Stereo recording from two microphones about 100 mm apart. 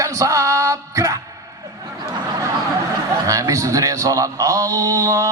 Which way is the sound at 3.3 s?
35° right (ahead or behind).